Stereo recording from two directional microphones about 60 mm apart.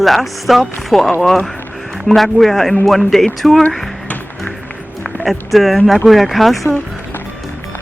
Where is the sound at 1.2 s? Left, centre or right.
Centre.